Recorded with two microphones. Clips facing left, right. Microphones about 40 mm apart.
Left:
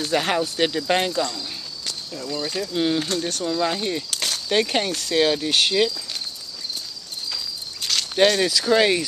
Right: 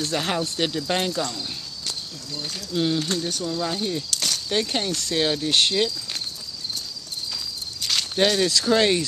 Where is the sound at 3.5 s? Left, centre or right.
Left.